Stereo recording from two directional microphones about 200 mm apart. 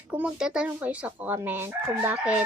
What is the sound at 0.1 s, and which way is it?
Speech, 5° right (ahead or behind).